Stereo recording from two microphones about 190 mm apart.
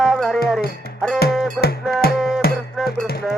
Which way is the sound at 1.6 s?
Centre (ahead or behind).